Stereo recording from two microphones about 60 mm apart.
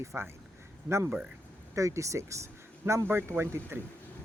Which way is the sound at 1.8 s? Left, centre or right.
Right.